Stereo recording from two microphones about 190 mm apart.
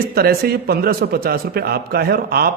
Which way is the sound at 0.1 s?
55° right (ahead or behind).